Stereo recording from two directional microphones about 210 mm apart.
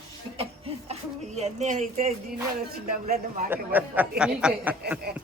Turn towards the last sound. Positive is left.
turn(degrees=-5)  # may be behind; listen again after turning